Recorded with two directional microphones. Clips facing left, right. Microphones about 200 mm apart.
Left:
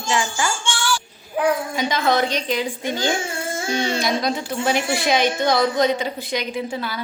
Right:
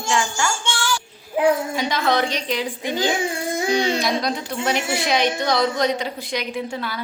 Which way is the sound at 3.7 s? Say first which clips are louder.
Even; centre (ahead or behind).